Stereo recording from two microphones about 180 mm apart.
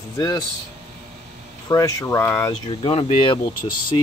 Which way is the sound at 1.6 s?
20° left (ahead or behind).